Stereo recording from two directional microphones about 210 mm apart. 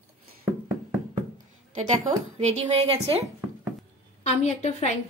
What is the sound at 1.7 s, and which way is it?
A woman's voice, 35° right (ahead or behind).